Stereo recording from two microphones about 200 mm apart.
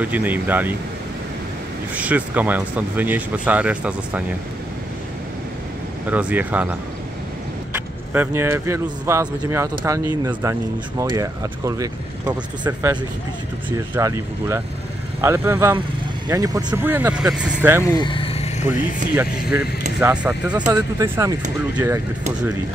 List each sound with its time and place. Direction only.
0.0 s speech: 10° right (ahead or behind)
2.0 s speech: 5° right (ahead or behind)
6.0 s speech: 5° right (ahead or behind)
7.7 s speech: 10° right (ahead or behind)
17.8 s vehicle: 20° left (ahead or behind)
20.0 s speech: 10° right (ahead or behind)